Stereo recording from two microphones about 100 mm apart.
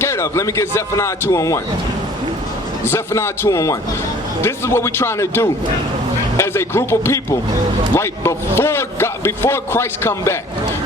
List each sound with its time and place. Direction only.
0.0 s a man's voice: 25° left (ahead or behind)
2.8 s a man's voice: 25° left (ahead or behind)